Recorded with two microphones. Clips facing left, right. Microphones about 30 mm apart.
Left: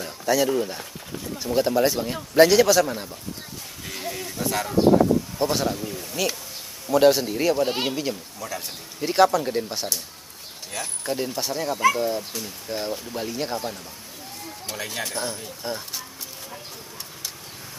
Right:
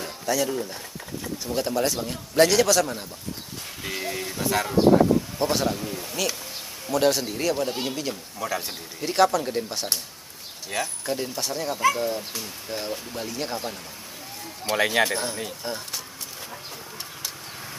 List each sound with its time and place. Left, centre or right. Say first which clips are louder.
0.2 s speech: left 4 dB; centre
0.6 s speech: left 5 dB; left
1.4 s speech: left 5 dB; centre
3.8 s a sound: right 2 dB; centre
5.4 s speech: even; centre
6.9 s speech: left 5 dB; centre
7.6 s speech: left 4 dB; left
7.9 s speech: left 2 dB; centre
8.4 s speech: right 4 dB; centre
9.0 s speech: left 2 dB; centre
10.7 s speech: right 5 dB; centre
11.1 s speech: left 1 dB; centre
14.8 s speech: right 10 dB; right
15.6 s speech: left 1 dB; centre